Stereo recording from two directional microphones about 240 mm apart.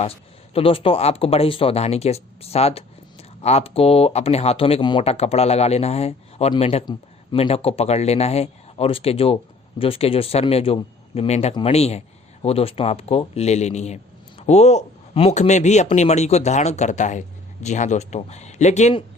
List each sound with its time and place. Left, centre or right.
0.5 s speech: left